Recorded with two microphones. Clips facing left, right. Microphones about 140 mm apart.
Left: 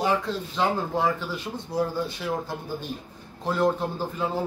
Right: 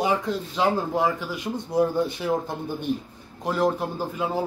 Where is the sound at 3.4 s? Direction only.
10° right (ahead or behind).